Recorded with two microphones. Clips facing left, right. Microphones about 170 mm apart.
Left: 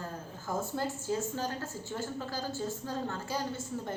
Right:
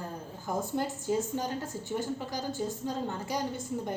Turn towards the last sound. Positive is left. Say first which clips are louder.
# right 3 dB
turn(degrees=-15)  # may be behind; listen again after turning